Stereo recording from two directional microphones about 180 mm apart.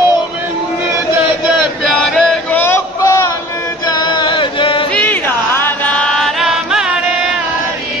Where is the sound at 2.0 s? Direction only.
Centre (ahead or behind); by 4.8 s 30° left (ahead or behind).